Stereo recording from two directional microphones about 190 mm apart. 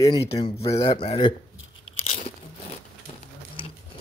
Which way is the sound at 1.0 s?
30° left (ahead or behind).